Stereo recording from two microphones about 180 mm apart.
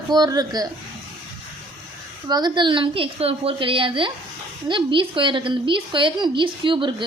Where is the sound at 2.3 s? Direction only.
25° right (ahead or behind).